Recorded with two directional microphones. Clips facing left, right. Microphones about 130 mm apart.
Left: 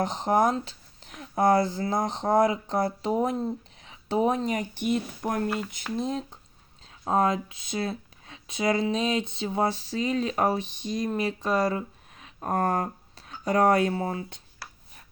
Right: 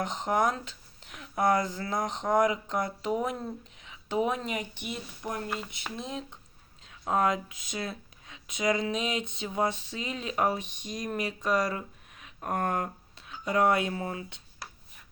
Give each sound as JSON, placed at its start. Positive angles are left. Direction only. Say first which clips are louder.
{"t": 0.0, "sound": "speech", "louder": "left 4 dB", "side_deg": 35}
{"t": 6.0, "sound": "speech", "louder": "left 8 dB", "side_deg": 35}